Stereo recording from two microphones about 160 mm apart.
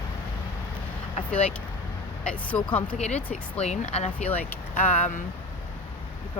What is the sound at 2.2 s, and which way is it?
Speech, 5° left (ahead or behind).